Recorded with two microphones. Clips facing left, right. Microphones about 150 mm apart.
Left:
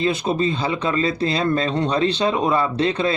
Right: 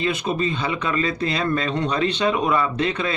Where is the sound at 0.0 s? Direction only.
30° left (ahead or behind).